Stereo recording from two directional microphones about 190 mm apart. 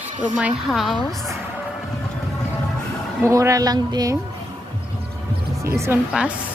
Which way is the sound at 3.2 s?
15° right (ahead or behind).